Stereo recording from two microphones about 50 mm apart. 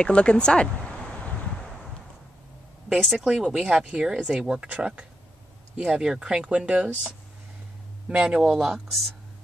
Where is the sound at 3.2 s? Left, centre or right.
Centre.